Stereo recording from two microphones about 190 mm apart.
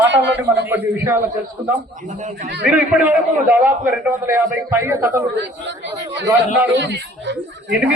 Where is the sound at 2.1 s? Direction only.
40° right (ahead or behind).